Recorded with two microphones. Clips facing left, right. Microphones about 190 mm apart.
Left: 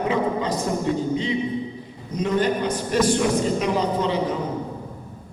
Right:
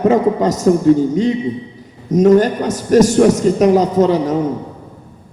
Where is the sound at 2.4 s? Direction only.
45° right (ahead or behind).